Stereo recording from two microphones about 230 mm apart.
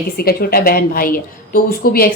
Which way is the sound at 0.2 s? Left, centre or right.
Left.